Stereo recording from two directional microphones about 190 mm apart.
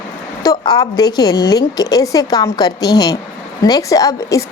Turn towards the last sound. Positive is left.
turn(degrees=15)  # may be behind; listen again after turning